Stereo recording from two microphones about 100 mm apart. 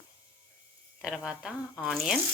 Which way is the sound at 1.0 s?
5° right (ahead or behind).